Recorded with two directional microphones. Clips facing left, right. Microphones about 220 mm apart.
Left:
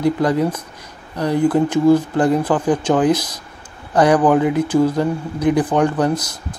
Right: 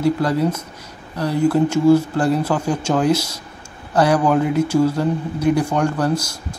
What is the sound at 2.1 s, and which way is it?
Speech, 15° left (ahead or behind).